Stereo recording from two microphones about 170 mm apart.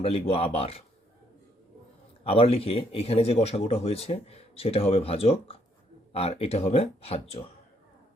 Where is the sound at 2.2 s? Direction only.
35° left (ahead or behind).